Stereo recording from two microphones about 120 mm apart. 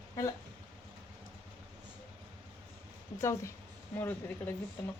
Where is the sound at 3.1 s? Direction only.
20° left (ahead or behind).